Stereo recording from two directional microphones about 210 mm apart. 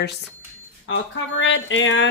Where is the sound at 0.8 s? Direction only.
65° left (ahead or behind).